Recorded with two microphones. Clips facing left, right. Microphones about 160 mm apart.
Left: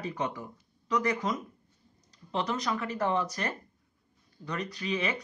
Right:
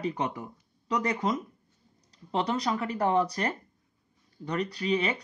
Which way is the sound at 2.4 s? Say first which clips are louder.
Right 3 dB; 35° right (ahead or behind).